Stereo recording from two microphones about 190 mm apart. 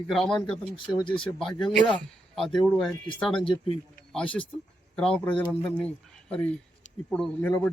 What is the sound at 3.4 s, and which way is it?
Speech, 30° left (ahead or behind).